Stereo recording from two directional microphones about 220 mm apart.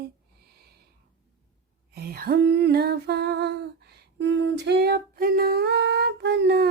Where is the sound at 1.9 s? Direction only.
45° right (ahead or behind).